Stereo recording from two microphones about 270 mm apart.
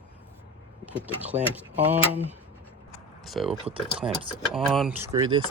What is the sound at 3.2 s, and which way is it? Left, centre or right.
Mechanisms, centre.